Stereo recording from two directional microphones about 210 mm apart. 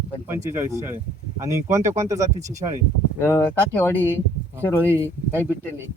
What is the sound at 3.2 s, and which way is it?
Speech, 15° left (ahead or behind).